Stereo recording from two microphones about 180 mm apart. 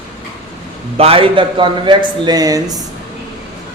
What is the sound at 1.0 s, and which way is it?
A man's voice, 30° right (ahead or behind).